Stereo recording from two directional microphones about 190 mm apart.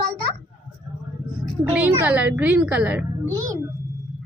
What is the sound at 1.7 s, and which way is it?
A woman's voice, 10° right (ahead or behind).